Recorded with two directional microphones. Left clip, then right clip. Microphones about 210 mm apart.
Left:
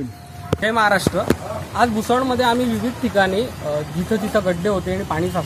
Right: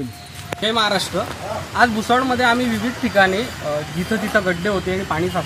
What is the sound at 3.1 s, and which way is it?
Speech, 20° left (ahead or behind).